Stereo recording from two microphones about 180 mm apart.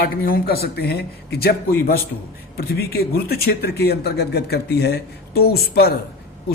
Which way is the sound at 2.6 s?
60° left (ahead or behind).